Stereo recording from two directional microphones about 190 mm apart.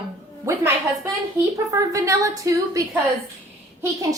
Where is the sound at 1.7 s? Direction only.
15° right (ahead or behind).